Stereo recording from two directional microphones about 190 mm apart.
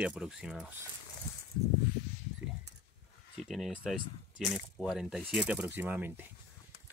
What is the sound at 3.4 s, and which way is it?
Speech, centre (ahead or behind).